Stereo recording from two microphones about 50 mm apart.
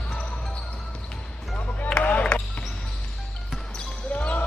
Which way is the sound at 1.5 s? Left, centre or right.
Left.